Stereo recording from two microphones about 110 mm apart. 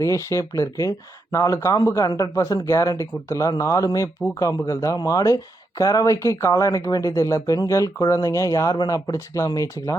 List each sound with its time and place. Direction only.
0.0 s speech: 30° left (ahead or behind)
9.1 s speech: 25° left (ahead or behind)